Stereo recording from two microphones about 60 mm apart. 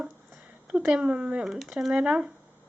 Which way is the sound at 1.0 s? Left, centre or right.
Right.